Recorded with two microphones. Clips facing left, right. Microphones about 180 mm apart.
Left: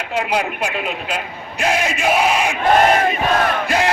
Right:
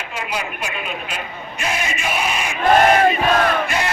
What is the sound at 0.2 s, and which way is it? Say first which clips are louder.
Speech: left 6 dB; 75° left (ahead or behind).